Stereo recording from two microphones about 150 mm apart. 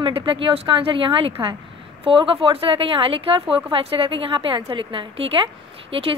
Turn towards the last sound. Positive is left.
turn(degrees=-40)  # may be behind; listen again after turning